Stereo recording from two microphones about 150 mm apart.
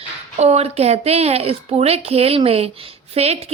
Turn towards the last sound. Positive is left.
turn(degrees=-45)  # may be behind; listen again after turning